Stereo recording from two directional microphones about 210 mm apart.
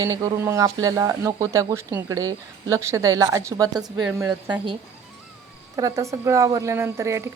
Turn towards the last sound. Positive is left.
turn(degrees=-15)  # may be behind; listen again after turning